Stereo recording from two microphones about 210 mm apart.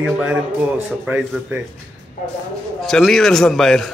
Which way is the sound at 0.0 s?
5° right (ahead or behind).